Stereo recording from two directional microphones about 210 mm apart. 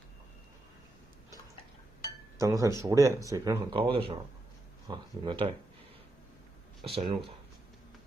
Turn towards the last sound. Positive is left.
turn(degrees=-25)  # may be behind; listen again after turning